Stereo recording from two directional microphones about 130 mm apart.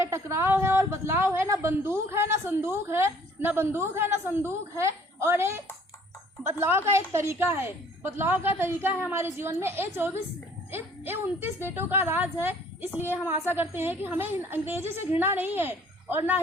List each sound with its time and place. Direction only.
0.0 s a woman's voice: 20° right (ahead or behind)